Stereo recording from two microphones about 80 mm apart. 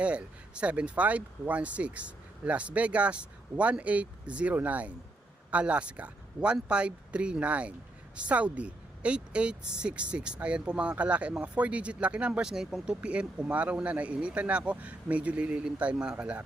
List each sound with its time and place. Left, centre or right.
0.0 s a woman's voice: centre